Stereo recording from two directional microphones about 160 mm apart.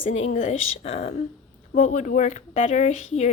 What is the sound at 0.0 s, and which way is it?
Speech, 40° left (ahead or behind).